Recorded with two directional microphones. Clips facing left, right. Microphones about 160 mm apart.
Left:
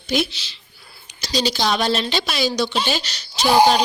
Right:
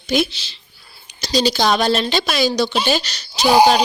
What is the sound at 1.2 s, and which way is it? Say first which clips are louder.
A woman's voice: right 4 dB; 40° right (ahead or behind).